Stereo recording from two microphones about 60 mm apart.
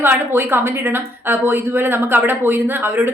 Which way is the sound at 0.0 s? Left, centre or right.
Right.